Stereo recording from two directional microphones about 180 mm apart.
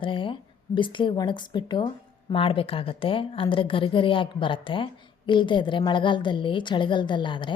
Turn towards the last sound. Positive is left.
turn(degrees=25)  # may be behind; listen again after turning